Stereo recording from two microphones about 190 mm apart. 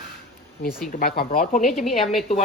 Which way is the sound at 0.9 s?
50° left (ahead or behind).